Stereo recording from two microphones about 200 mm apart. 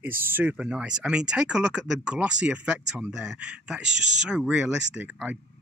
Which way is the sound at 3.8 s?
65° left (ahead or behind).